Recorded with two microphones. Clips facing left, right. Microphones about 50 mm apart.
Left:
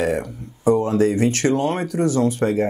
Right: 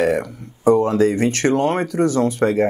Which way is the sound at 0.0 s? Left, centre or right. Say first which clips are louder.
Right 3 dB; right.